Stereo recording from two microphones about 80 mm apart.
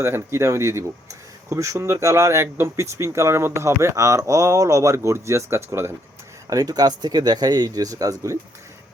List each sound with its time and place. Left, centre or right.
0.0 s speech: right
6.5 s speech: right